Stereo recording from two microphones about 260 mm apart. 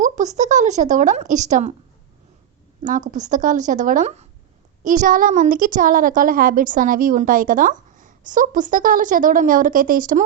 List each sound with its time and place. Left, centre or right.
0.0 s a woman's voice: right
3.1 s a woman's voice: right